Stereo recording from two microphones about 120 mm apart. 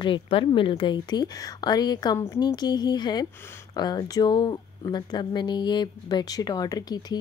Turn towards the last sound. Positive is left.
turn(degrees=35)  # may be behind; listen again after turning